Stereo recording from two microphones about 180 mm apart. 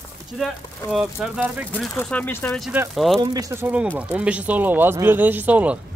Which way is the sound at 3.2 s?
20° right (ahead or behind).